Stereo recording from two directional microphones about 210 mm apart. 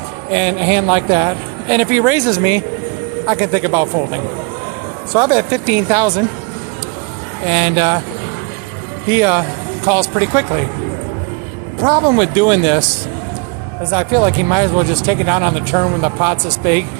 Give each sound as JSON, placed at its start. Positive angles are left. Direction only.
{"t": 0.3, "sound": "speech", "side_deg": -20}
{"t": 7.4, "sound": "speech", "side_deg": -20}
{"t": 9.0, "sound": "speech", "side_deg": -10}
{"t": 11.8, "sound": "speech", "side_deg": -15}
{"t": 13.9, "sound": "speech", "side_deg": -10}